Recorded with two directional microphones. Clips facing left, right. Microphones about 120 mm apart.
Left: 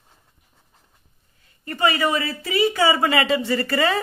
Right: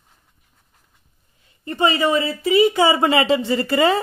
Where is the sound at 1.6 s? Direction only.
25° right (ahead or behind).